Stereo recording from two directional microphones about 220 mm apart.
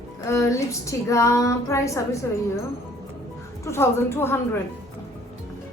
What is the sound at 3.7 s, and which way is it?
Female singing, 10° left (ahead or behind).